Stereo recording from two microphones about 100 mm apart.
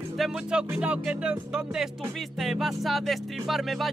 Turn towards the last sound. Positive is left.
turn(degrees=0)  # may be behind; listen again after turning